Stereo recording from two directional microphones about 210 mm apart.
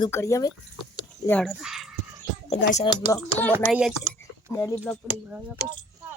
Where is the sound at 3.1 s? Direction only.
10° left (ahead or behind).